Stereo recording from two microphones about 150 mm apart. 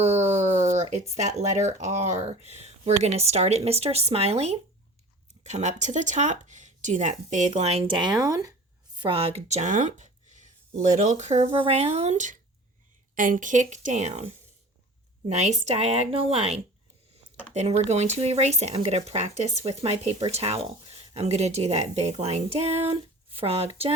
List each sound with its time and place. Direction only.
0.3 s a sound: 50° right (ahead or behind)
1.1 s speech: 50° right (ahead or behind); by 8.5 s 20° right (ahead or behind)
9.0 s a woman's voice: 35° right (ahead or behind)
15.3 s speech: 50° right (ahead or behind)